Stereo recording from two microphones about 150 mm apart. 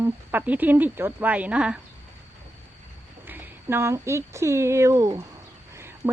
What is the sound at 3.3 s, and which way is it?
A woman's voice, 15° right (ahead or behind).